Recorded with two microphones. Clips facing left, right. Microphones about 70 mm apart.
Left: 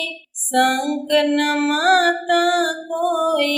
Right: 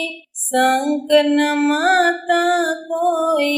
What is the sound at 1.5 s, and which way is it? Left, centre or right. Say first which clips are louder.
Child singing: right 2 dB; left.